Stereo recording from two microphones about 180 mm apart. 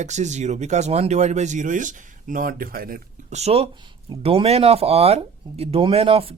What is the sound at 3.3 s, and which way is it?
Speech, 35° right (ahead or behind).